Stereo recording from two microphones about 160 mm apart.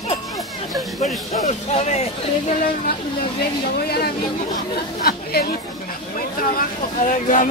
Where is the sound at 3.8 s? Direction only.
75° left (ahead or behind).